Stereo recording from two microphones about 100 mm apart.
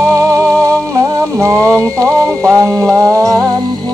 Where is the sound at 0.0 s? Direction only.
30° right (ahead or behind).